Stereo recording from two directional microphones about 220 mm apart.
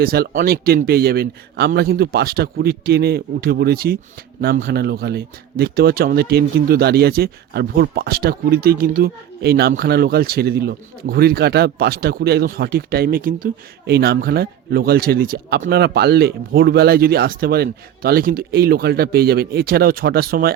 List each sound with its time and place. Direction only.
0.0 s speech: 40° right (ahead or behind)